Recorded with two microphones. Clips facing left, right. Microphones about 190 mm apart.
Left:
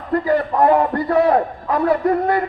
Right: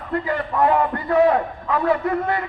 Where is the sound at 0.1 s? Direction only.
40° left (ahead or behind).